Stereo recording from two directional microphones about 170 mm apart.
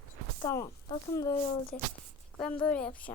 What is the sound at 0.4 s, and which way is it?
Speech, 20° left (ahead or behind).